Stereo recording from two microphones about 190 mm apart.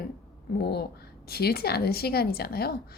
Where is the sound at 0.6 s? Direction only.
60° left (ahead or behind).